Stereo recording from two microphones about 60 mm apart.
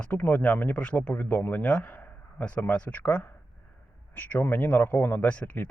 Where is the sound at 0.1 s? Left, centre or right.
Left.